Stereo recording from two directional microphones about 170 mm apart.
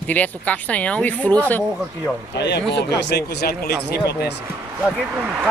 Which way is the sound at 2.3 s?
85° left.